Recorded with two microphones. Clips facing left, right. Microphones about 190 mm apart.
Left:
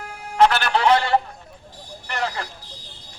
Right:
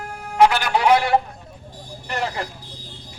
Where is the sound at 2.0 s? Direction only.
15° right (ahead or behind).